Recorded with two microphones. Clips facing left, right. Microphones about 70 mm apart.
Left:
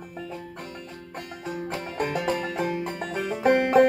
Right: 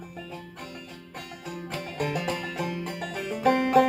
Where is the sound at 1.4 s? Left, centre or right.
Left.